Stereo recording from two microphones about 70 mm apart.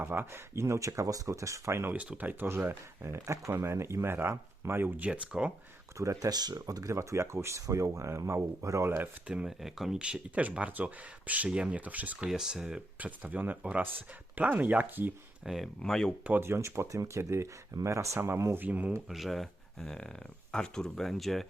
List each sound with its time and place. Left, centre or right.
0.0 s speech: right
1.9 s speech: right
4.9 s speech: centre
6.0 s speech: right
6.3 s speech: right
6.8 s speech: right
9.2 s speech: centre
12.3 s speech: centre
12.6 s speech: right
15.4 s speech: centre
15.8 s speech: centre
16.4 s speech: right
18.6 s speech: right
19.0 s speech: centre